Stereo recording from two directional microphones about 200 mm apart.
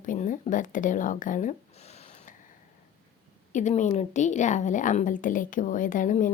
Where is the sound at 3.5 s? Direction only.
40° left (ahead or behind).